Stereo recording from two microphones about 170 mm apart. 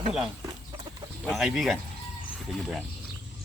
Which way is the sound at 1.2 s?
Centre (ahead or behind).